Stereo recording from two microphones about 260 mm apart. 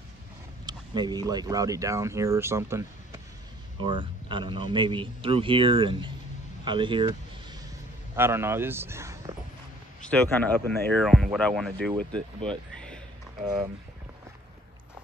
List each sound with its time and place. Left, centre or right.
0.7 s speech: centre
8.2 s speech: centre
10.0 s speech: centre
12.4 s music: centre